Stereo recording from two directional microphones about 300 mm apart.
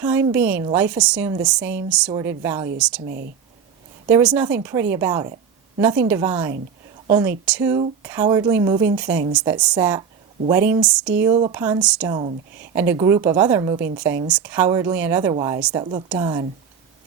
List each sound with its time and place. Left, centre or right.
0.0 s a woman's voice: centre
4.1 s a woman's voice: centre